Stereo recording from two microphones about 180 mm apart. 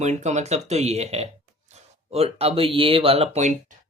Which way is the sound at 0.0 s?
40° right (ahead or behind).